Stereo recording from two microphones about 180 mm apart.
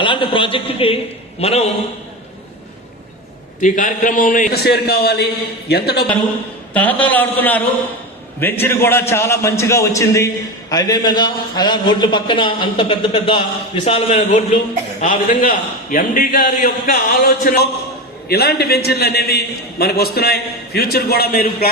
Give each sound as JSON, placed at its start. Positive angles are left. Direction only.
{"t": 0.0, "sound": "a man's voice", "side_deg": 30}
{"t": 3.6, "sound": "a man's voice", "side_deg": 45}
{"t": 6.7, "sound": "a man's voice", "side_deg": 10}
{"t": 15.0, "sound": "a man's voice", "side_deg": 50}